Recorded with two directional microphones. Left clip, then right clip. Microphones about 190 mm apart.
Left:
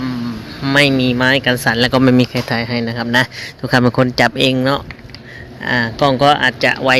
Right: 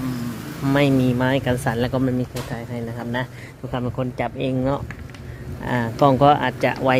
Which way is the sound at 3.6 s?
30° left (ahead or behind).